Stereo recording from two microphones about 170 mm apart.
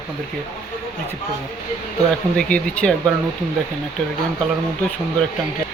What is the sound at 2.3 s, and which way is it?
Speech, 5° left (ahead or behind).